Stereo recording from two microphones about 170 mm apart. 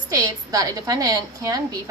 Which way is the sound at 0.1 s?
20° right (ahead or behind).